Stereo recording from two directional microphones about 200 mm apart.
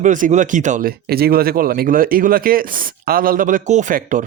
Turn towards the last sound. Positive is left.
turn(degrees=-40)  # may be behind; listen again after turning